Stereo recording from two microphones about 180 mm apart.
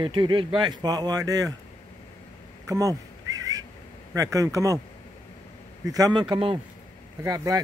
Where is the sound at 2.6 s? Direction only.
20° right (ahead or behind).